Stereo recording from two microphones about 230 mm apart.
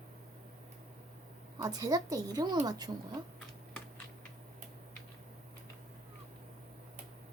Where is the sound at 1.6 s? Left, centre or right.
Centre.